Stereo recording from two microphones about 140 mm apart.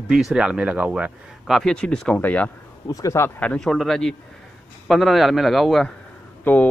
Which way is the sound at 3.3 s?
5° left (ahead or behind).